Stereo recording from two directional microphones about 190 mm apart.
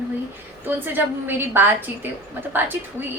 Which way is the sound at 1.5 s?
10° right (ahead or behind).